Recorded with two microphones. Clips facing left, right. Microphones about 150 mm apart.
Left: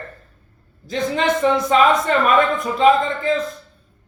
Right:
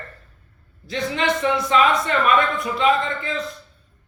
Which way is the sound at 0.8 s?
45° left (ahead or behind).